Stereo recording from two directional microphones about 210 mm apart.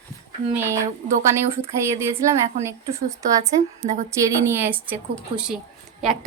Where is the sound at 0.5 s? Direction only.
10° right (ahead or behind).